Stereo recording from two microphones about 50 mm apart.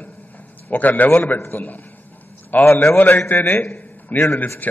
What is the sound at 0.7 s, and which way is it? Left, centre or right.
A man's voice, left.